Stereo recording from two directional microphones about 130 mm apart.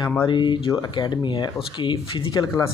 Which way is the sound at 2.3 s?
25° left (ahead or behind).